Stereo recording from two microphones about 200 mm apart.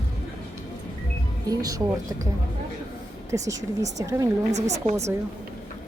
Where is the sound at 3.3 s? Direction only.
15° right (ahead or behind).